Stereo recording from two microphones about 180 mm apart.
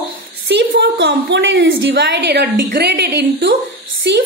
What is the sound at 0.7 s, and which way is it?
A woman's voice, 75° right (ahead or behind).